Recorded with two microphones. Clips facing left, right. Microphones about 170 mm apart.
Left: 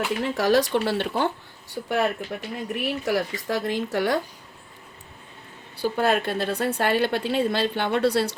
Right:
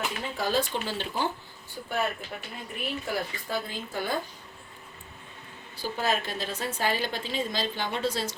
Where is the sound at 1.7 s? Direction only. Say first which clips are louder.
Left 6 dB; 85° left.